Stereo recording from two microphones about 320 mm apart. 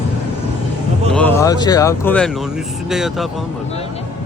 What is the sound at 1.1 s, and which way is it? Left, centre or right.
Speech, centre.